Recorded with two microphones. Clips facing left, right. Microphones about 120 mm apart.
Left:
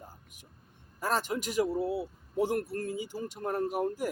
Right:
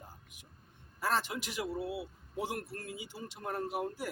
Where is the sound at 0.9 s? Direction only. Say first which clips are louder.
Left 3 dB; 45° left (ahead or behind).